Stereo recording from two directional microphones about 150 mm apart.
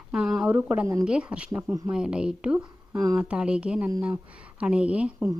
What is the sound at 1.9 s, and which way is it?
A woman's voice, 5° right (ahead or behind).